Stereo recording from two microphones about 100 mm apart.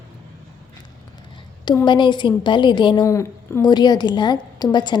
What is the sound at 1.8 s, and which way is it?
A woman's voice, 50° left (ahead or behind).